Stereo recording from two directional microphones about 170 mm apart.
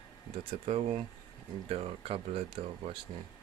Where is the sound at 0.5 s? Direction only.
35° right (ahead or behind).